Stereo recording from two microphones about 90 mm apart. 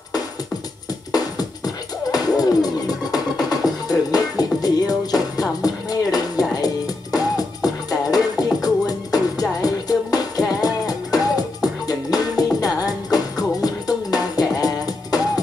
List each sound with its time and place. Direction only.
1.1 s music: 45° left (ahead or behind)